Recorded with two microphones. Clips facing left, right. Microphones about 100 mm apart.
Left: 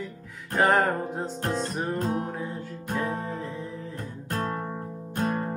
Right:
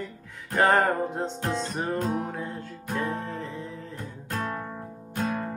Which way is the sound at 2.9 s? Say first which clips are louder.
Even; 10° left (ahead or behind).